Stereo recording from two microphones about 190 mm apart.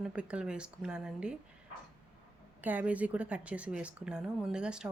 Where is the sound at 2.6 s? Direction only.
10° right (ahead or behind).